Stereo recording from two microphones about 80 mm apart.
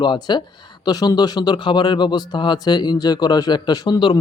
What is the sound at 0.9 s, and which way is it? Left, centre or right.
Speech, left.